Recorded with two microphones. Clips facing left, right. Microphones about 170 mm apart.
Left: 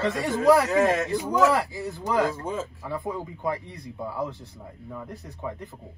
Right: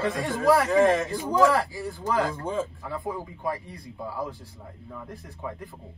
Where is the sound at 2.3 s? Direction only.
5° left (ahead or behind).